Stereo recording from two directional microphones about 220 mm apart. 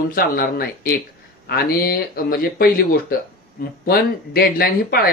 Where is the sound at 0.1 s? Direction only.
40° left (ahead or behind).